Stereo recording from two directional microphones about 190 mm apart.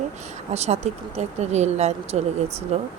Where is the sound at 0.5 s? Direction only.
35° right (ahead or behind).